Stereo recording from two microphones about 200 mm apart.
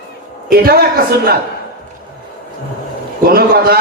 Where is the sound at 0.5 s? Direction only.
50° right (ahead or behind).